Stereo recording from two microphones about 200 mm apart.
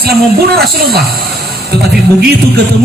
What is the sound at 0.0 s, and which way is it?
Speech, 50° right (ahead or behind).